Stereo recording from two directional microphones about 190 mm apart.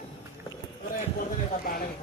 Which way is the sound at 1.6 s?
50° left (ahead or behind).